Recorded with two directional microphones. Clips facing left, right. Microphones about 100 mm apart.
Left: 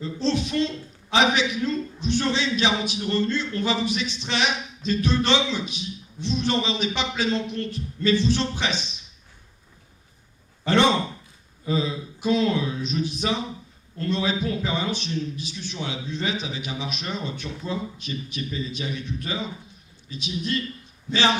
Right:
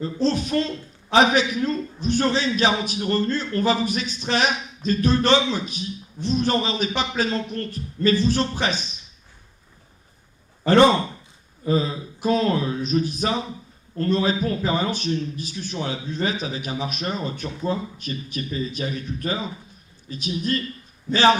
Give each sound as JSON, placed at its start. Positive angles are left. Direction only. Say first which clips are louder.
{"t": 0.0, "sound": "a man's voice", "louder": "right 2 dB", "side_deg": -45}
{"t": 10.6, "sound": "a man's voice", "louder": "right 5 dB", "side_deg": -40}